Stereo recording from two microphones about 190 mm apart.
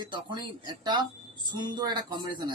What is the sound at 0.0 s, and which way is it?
Speech, 25° right (ahead or behind).